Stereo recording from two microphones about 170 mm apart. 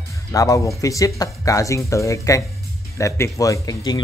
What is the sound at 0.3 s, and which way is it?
Speech, 20° left (ahead or behind).